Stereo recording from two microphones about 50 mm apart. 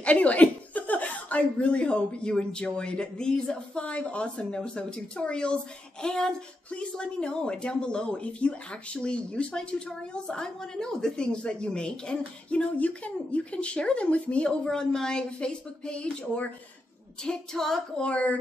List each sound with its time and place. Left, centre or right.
0.0 s speech: left
17.2 s music: centre
18.0 s speech: left